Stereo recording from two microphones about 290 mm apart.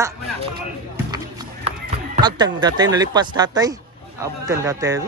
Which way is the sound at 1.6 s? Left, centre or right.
Centre.